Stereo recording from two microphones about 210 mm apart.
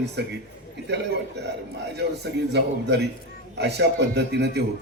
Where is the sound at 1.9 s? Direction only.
55° right (ahead or behind).